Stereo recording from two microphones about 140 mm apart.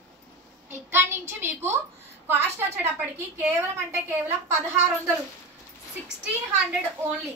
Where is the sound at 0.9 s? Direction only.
15° right (ahead or behind).